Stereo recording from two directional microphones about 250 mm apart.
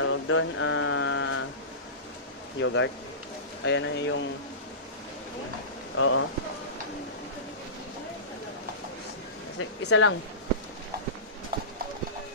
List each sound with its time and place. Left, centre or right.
0.0 s mantra: left
2.6 s speech: left
5.9 s speech: left
9.6 s speech: left
11.5 s clip-clop: right